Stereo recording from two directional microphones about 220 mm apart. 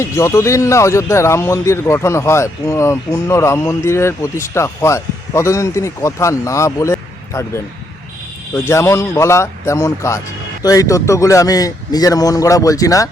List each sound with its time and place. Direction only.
0.0 s speech: 15° left (ahead or behind)